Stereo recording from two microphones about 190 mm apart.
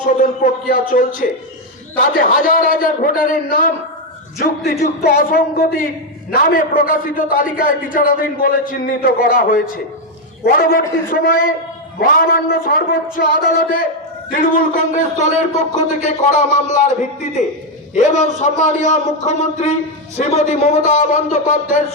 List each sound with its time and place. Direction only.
0.0 s a man's voice: 45° left (ahead or behind)
17.9 s a man's voice: 40° left (ahead or behind)